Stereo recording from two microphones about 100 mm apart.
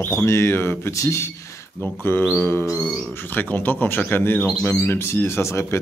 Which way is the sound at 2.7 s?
Centre (ahead or behind).